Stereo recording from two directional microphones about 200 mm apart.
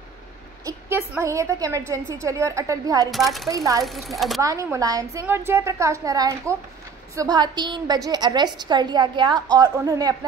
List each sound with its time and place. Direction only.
0.7 s a woman's voice: 10° right (ahead or behind)
3.1 s speech: centre (ahead or behind)
3.4 s a woman's voice: 15° right (ahead or behind)
3.8 s speech: centre (ahead or behind)
4.4 s a woman's voice: 15° right (ahead or behind)